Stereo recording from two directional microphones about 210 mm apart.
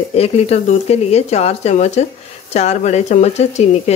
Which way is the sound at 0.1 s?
30° left (ahead or behind).